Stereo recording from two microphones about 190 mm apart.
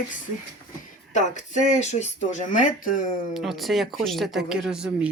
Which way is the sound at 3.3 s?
Centre (ahead or behind).